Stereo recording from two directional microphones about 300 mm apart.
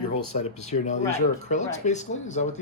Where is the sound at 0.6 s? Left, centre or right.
Left.